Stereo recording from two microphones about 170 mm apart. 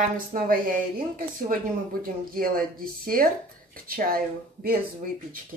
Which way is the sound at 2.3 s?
60° right (ahead or behind).